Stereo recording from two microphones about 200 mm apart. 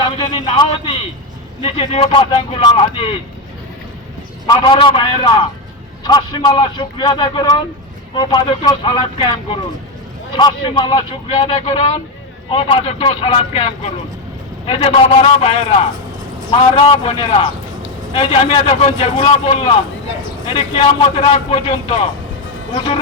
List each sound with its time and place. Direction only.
0.3 s a man's voice: 30° left (ahead or behind)
4.4 s a man's voice: 25° left (ahead or behind)